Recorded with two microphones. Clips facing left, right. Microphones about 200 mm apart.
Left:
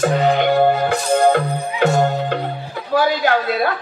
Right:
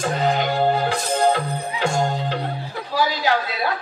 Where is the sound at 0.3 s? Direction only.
60° left (ahead or behind).